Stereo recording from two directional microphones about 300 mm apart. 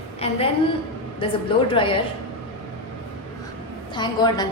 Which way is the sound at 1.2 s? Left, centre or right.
Centre.